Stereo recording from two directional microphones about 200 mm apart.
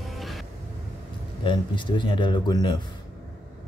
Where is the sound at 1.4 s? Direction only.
25° left (ahead or behind).